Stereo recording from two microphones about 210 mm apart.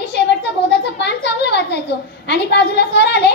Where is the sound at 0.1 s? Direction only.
55° left (ahead or behind).